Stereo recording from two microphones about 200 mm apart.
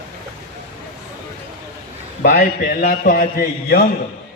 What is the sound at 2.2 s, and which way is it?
A man's voice, 50° left (ahead or behind).